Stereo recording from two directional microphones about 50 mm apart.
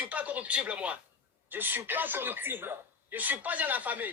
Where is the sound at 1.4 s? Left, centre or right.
Right.